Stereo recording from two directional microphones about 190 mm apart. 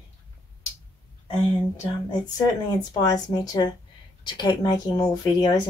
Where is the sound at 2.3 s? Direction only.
20° left (ahead or behind).